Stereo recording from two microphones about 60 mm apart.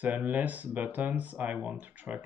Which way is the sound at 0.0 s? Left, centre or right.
Right.